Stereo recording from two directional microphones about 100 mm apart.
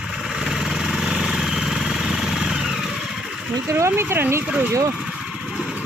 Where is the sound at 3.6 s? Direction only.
25° right (ahead or behind).